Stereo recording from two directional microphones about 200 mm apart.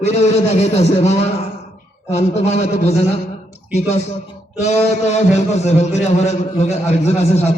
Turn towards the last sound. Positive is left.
turn(degrees=30)  # may be behind; listen again after turning